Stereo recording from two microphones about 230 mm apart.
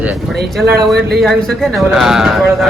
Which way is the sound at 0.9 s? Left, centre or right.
Right.